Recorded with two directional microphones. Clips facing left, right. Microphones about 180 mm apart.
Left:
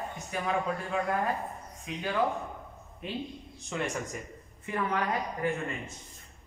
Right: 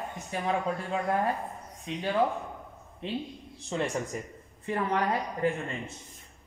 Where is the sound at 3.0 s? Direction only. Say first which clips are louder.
Right 2 dB; 30° right (ahead or behind).